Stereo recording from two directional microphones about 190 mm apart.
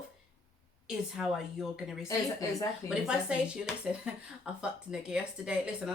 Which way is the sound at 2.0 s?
15° left (ahead or behind).